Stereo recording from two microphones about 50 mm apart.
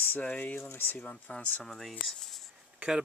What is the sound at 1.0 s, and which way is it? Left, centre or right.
Speech, left.